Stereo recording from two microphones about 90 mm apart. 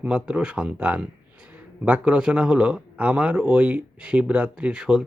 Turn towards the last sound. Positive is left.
turn(degrees=-10)  # may be behind; listen again after turning